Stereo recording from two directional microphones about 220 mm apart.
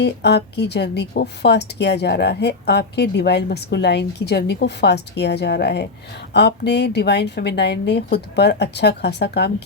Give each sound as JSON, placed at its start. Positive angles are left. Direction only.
{"t": 0.0, "sound": "speech", "side_deg": 50}